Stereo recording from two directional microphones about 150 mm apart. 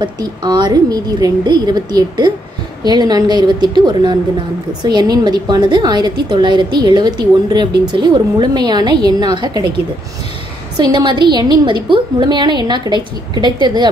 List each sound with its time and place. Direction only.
0.0 s a woman's voice: 30° right (ahead or behind)
10.8 s a woman's voice: 30° right (ahead or behind)